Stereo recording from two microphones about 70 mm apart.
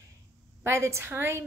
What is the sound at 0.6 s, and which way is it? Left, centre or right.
Speech, right.